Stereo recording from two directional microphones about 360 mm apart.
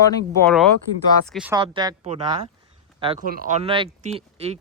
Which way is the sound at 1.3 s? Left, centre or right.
Centre.